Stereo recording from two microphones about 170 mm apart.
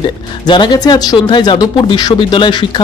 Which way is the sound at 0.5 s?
25° left (ahead or behind).